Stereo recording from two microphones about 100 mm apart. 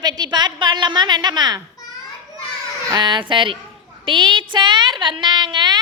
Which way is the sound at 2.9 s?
50° right (ahead or behind).